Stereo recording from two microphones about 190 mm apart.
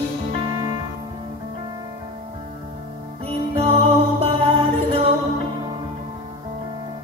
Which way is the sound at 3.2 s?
30° right (ahead or behind).